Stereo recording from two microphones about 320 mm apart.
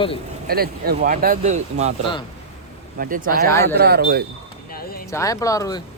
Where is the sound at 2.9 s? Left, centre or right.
Right.